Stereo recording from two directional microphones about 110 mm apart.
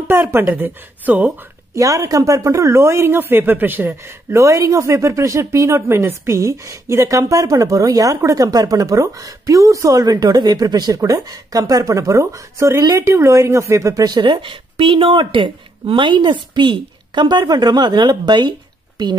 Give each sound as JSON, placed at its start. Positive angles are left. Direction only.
{"t": 0.1, "sound": "speech", "side_deg": -20}
{"t": 1.8, "sound": "speech", "side_deg": -30}